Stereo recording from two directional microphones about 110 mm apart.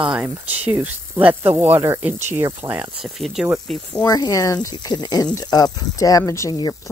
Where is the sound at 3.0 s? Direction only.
5° right (ahead or behind).